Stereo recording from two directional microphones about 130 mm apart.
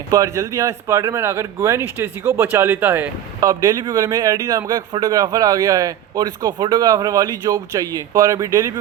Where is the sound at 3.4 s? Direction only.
30° right (ahead or behind).